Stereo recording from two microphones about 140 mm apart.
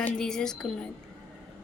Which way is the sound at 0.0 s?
5° left (ahead or behind).